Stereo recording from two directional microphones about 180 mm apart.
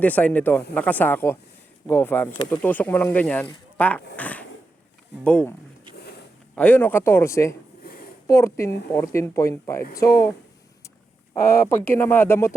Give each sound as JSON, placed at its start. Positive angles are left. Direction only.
{"t": 0.0, "sound": "speech", "side_deg": 10}
{"t": 6.6, "sound": "speech", "side_deg": 10}
{"t": 7.9, "sound": "a sound", "side_deg": 55}
{"t": 8.3, "sound": "speech", "side_deg": 15}
{"t": 11.3, "sound": "speech", "side_deg": 15}